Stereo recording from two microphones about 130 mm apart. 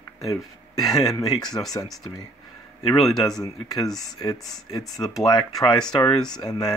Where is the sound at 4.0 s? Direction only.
30° left (ahead or behind).